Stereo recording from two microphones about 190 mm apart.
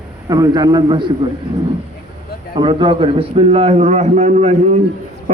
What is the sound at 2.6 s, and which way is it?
A man's voice, 25° right (ahead or behind).